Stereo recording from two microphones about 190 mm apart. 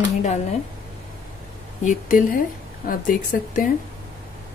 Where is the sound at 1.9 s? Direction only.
45° left (ahead or behind).